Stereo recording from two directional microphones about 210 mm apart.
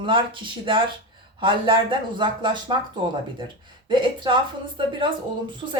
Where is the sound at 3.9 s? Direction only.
20° right (ahead or behind).